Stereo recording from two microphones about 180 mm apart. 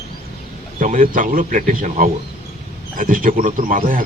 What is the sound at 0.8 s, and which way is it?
A man's voice, 45° right (ahead or behind).